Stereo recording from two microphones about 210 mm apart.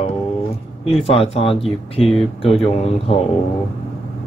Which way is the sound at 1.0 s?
30° left (ahead or behind).